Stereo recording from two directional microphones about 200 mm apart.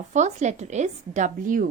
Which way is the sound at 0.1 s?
35° right (ahead or behind).